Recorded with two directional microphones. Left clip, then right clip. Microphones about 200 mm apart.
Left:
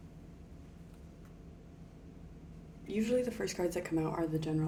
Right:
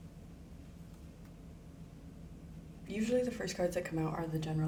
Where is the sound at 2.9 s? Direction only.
35° left (ahead or behind).